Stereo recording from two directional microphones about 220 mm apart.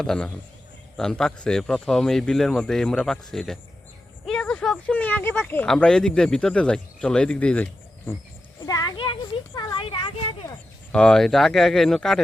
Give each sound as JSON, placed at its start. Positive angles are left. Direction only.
{"t": 0.0, "sound": "speech", "side_deg": 5}
{"t": 8.6, "sound": "a sound", "side_deg": 15}
{"t": 9.6, "sound": "speech", "side_deg": 20}
{"t": 10.9, "sound": "speech", "side_deg": 5}